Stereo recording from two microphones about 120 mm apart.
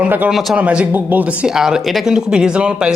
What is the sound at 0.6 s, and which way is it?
Speech, 10° right (ahead or behind).